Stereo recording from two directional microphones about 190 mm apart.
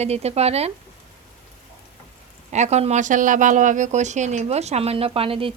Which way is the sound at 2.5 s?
35° right (ahead or behind).